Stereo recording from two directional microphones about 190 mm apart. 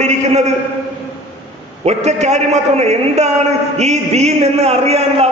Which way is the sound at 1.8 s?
35° right (ahead or behind).